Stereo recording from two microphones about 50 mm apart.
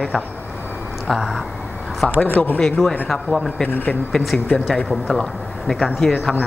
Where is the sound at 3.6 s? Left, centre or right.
Left.